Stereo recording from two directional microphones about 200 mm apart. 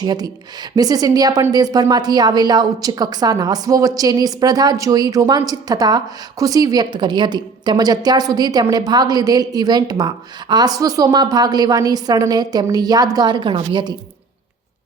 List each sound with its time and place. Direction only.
0.0 s a woman's voice: 20° right (ahead or behind)